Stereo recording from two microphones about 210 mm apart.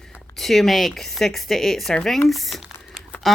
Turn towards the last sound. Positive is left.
turn(degrees=0)  # may be behind; listen again after turning